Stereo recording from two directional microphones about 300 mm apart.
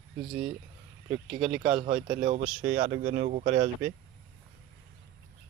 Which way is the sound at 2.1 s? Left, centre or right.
Centre.